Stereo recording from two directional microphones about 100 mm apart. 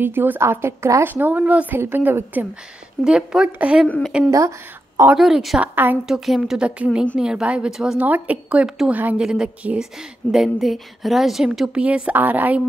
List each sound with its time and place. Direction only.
0.0 s speech: 20° right (ahead or behind)
1.0 s speech: 15° right (ahead or behind)
3.0 s a woman's voice: 10° right (ahead or behind)
4.3 s speech: 30° right (ahead or behind)
5.1 s a woman's voice: 5° right (ahead or behind)
5.6 s speech: 20° right (ahead or behind)
6.0 s a woman's voice: 5° right (ahead or behind)